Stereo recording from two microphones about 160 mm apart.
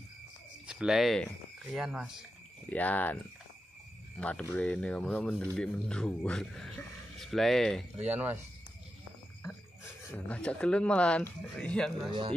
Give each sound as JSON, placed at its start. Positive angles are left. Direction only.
{"t": 0.7, "sound": "speech", "side_deg": -5}
{"t": 2.7, "sound": "speech", "side_deg": 10}
{"t": 4.2, "sound": "speech", "side_deg": 10}
{"t": 8.0, "sound": "speech", "side_deg": -10}
{"t": 10.1, "sound": "speech", "side_deg": 10}
{"t": 12.1, "sound": "speech", "side_deg": -30}